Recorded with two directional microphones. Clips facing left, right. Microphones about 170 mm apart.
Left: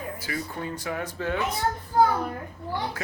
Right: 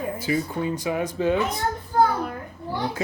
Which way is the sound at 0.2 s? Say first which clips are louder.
Right 8 dB; 20° right (ahead or behind).